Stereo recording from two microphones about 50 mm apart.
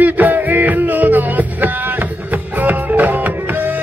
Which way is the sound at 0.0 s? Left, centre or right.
Right.